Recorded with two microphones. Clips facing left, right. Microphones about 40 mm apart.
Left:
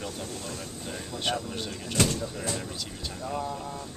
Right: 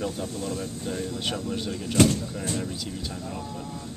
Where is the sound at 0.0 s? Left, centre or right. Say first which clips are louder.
Right 6 dB; centre.